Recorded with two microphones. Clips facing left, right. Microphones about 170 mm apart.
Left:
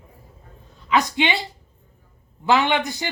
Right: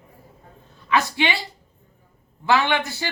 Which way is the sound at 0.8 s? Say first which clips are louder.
Left 1 dB; 20° left (ahead or behind).